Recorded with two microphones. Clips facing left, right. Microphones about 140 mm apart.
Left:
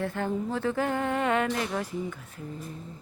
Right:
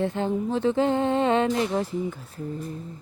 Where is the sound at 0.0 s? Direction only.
20° right (ahead or behind).